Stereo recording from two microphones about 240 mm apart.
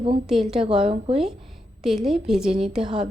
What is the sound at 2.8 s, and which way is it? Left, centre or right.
Speech, right.